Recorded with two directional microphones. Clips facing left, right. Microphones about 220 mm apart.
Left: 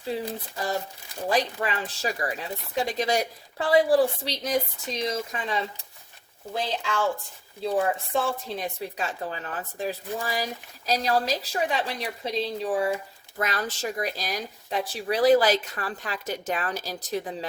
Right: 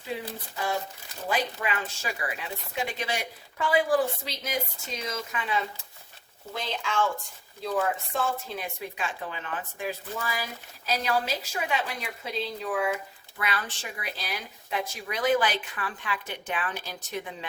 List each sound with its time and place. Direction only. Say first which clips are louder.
0.5 s speech: right 1 dB; 40° left (ahead or behind)